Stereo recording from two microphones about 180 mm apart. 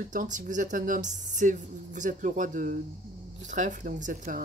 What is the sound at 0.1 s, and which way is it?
Speech, 45° right (ahead or behind).